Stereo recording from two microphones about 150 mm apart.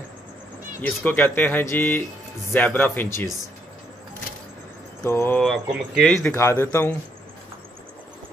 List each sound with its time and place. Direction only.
0.8 s speech: 10° left (ahead or behind)
5.0 s speech: 15° left (ahead or behind)
5.7 s speech: 5° right (ahead or behind)
6.0 s speech: 5° left (ahead or behind)
6.3 s speech: 20° left (ahead or behind)